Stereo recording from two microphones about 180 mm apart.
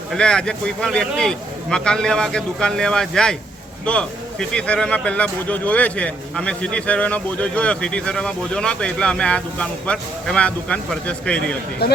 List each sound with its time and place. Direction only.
0.1 s speech: 5° left (ahead or behind)
11.8 s speech: 60° left (ahead or behind)